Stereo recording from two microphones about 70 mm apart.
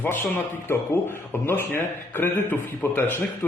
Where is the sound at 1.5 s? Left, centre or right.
Left.